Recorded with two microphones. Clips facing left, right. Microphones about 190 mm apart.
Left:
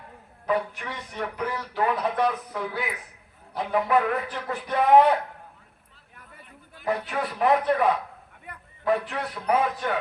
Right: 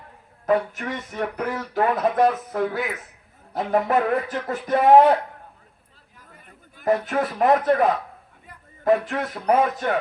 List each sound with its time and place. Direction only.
0.4 s speech: 45° right (ahead or behind)
6.4 s speech: 45° right (ahead or behind)
8.5 s a sound: 65° left (ahead or behind)
8.8 s speech: 45° right (ahead or behind)